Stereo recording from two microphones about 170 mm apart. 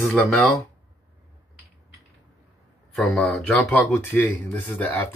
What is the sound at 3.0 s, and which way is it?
Speech, 5° left (ahead or behind).